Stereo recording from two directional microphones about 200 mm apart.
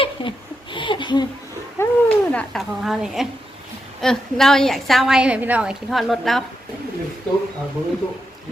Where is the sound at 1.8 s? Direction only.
15° left (ahead or behind).